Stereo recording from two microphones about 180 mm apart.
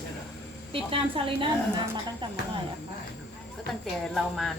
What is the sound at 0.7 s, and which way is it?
Speech, 30° right (ahead or behind).